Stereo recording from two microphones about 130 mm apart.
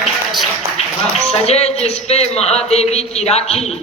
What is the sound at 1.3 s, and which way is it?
A man's voice, 50° left (ahead or behind).